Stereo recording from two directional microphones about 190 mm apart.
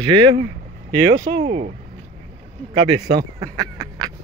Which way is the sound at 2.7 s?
20° right (ahead or behind).